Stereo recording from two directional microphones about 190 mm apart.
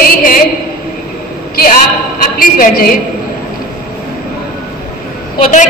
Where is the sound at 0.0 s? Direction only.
50° left (ahead or behind).